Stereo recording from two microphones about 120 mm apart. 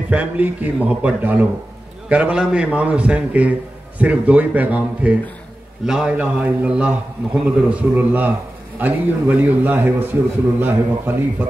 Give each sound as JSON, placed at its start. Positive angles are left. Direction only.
{"t": 0.1, "sound": "a man's voice", "side_deg": -15}